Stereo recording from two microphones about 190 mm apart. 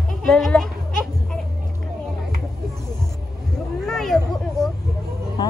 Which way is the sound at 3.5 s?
Centre (ahead or behind).